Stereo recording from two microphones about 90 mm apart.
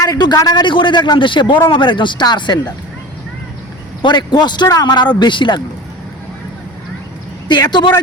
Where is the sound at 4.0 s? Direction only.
55° left (ahead or behind).